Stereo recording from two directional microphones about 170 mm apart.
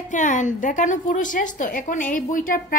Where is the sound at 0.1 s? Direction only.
45° left (ahead or behind).